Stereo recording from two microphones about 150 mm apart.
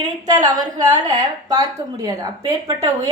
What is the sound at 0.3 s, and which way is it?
Speech, 30° right (ahead or behind).